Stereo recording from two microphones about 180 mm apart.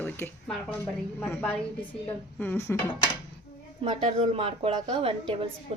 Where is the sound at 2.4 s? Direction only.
10° left (ahead or behind).